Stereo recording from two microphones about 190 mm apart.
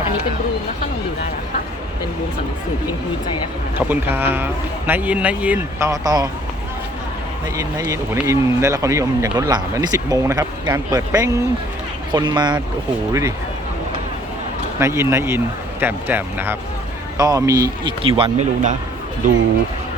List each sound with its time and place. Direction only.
3.8 s speech: 10° right (ahead or behind)
5.9 s speech: 20° right (ahead or behind)
7.5 s speech: 15° right (ahead or behind)
14.8 s speech: 15° right (ahead or behind)
18.0 s speech: 30° right (ahead or behind); by 19.4 s 45° right (ahead or behind)